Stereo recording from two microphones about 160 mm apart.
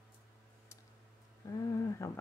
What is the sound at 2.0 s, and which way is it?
Speech, 20° left (ahead or behind).